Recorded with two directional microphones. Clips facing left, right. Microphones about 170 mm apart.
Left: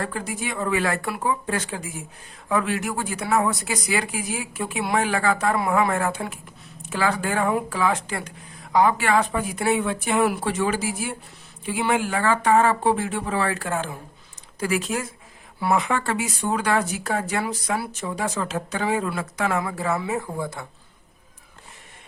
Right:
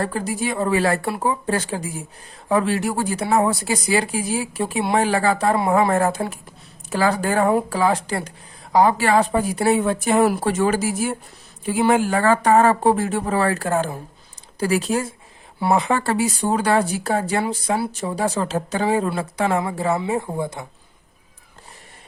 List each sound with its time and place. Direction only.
0.0 s speech: 35° right (ahead or behind)